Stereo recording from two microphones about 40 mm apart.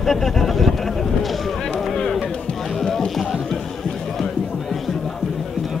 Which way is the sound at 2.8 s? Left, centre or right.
Centre.